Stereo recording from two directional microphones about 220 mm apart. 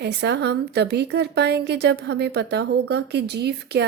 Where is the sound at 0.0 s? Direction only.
50° right (ahead or behind).